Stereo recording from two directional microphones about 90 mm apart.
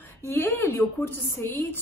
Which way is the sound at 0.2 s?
25° left (ahead or behind).